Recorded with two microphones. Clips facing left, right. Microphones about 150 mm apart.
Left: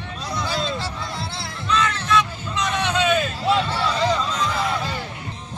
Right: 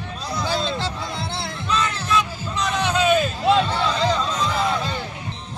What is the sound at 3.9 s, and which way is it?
Music, centre (ahead or behind).